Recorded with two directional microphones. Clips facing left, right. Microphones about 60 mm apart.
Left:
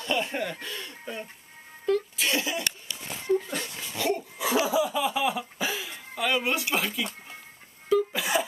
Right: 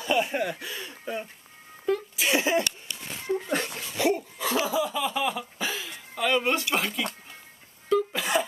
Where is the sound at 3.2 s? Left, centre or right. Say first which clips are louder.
Left 4 dB; centre.